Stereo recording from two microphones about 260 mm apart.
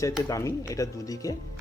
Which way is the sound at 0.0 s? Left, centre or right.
Centre.